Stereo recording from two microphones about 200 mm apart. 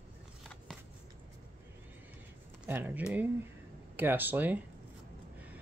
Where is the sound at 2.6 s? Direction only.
10° right (ahead or behind).